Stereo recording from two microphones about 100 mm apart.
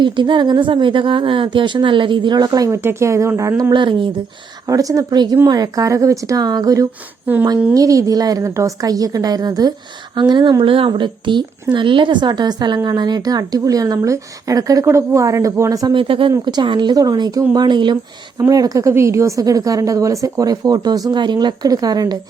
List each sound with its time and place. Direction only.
0.0 s a woman's voice: 50° right (ahead or behind); by 3.5 s 30° right (ahead or behind)
3.7 s a woman's voice: 55° right (ahead or behind)
4.6 s a woman's voice: 35° right (ahead or behind)
10.2 s a woman's voice: 50° right (ahead or behind); by 15.9 s 35° right (ahead or behind)
15.9 s a woman's voice: 60° right (ahead or behind)
18.3 s a woman's voice: 35° right (ahead or behind)